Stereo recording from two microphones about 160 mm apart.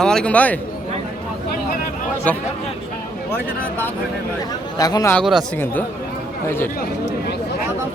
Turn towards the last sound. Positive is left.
turn(degrees=90)